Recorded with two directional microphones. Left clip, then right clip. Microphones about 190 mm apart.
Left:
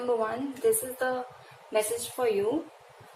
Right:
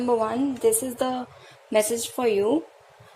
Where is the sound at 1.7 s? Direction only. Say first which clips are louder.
Right 6 dB; 55° right (ahead or behind).